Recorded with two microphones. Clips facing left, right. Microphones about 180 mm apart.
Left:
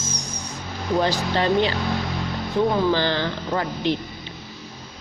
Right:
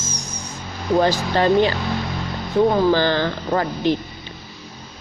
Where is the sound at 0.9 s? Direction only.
45° right (ahead or behind).